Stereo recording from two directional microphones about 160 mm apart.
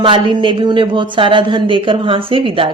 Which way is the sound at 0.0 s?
30° right (ahead or behind).